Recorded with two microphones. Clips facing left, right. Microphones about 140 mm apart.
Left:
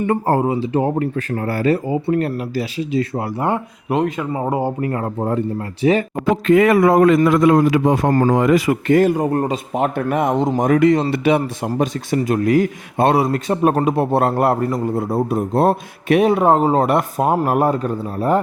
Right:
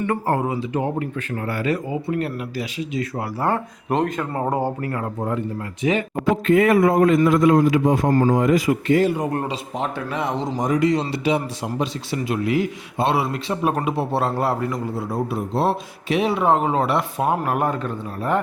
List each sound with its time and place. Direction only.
0.1 s speech: 30° left (ahead or behind)
3.8 s speech: 5° left (ahead or behind)
4.8 s speech: 25° left (ahead or behind)
6.3 s a man's voice: 90° left; by 9.2 s 50° left (ahead or behind)
9.2 s speech: 35° left (ahead or behind)
9.5 s a man's voice: 55° left (ahead or behind)
14.7 s a man's voice: 40° left (ahead or behind)